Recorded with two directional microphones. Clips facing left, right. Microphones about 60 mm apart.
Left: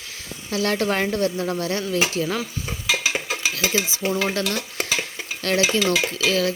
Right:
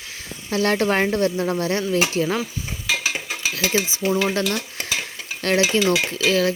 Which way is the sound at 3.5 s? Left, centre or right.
Right.